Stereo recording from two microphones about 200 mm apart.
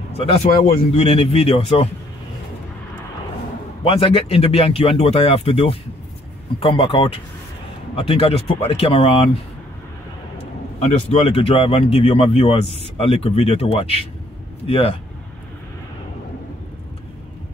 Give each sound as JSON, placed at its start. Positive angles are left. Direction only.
{"t": 0.2, "sound": "speech", "side_deg": 30}
{"t": 3.8, "sound": "speech", "side_deg": 30}
{"t": 10.3, "sound": "speech", "side_deg": 30}